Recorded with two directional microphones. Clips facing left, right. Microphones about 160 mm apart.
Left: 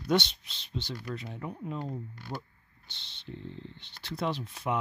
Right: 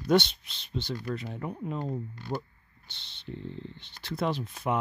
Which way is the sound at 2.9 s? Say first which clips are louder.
Right 3 dB; 55° right (ahead or behind).